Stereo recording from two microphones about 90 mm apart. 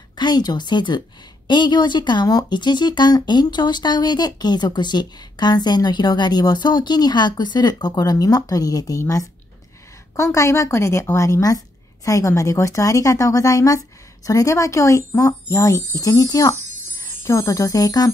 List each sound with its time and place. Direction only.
0.2 s a woman's voice: 50° left (ahead or behind)
17.0 s speech: 35° left (ahead or behind)